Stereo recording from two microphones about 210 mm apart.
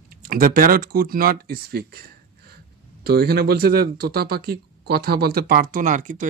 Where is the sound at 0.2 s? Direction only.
40° right (ahead or behind).